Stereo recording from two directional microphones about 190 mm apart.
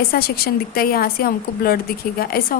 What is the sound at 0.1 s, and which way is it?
Speech, 55° left (ahead or behind).